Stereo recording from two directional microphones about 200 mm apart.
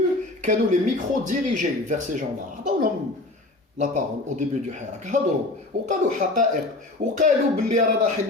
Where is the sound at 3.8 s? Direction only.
35° right (ahead or behind).